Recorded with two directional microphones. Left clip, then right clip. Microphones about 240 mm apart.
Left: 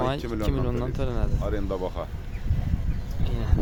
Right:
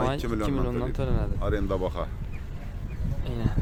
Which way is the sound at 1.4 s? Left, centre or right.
Right.